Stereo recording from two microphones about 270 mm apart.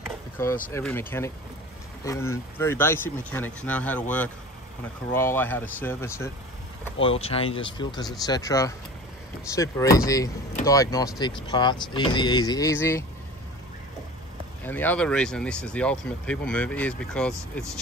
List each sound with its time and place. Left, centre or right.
0.7 s speech: centre
5.1 s speech: centre
7.0 s speech: left
14.6 s speech: centre